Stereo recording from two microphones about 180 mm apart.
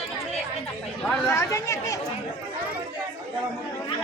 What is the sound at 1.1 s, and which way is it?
Chatter, 5° left (ahead or behind).